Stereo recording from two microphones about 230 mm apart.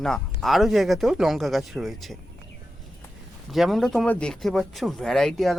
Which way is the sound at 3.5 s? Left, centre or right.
Centre.